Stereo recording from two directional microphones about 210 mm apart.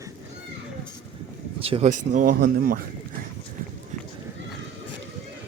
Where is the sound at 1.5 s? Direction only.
25° right (ahead or behind).